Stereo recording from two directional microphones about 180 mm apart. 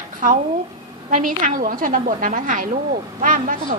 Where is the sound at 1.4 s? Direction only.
45° right (ahead or behind).